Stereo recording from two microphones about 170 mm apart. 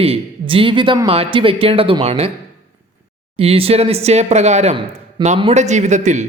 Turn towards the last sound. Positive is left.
turn(degrees=-45)  # may be behind; listen again after turning